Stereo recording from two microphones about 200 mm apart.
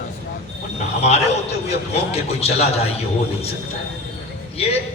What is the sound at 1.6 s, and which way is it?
A man's voice, 30° left (ahead or behind).